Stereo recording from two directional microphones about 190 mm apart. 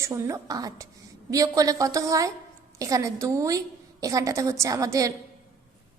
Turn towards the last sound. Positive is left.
turn(degrees=-15)  # may be behind; listen again after turning